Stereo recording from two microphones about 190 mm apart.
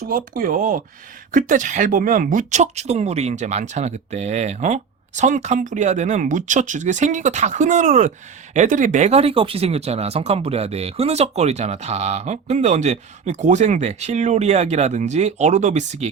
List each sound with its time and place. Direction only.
0.1 s speech: 45° right (ahead or behind)